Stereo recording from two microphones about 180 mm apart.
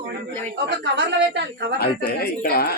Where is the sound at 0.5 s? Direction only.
75° right (ahead or behind).